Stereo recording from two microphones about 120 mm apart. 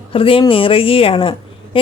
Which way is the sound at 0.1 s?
50° left (ahead or behind).